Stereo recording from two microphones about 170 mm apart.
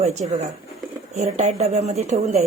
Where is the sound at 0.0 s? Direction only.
40° right (ahead or behind).